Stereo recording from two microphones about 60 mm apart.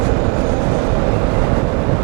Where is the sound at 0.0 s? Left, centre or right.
Right.